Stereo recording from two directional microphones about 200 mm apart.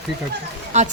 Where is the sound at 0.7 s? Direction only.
35° right (ahead or behind).